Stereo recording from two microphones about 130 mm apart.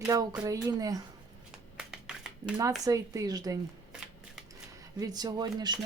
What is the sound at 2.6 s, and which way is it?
Speech, 25° right (ahead or behind).